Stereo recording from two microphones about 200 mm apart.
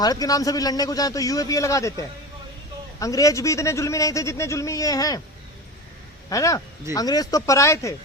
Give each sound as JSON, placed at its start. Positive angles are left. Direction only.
{"t": 0.0, "sound": "a man's voice", "side_deg": 20}
{"t": 6.3, "sound": "a man's voice", "side_deg": 15}